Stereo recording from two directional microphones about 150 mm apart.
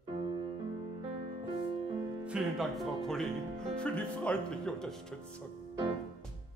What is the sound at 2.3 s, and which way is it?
Speech, 5° right (ahead or behind).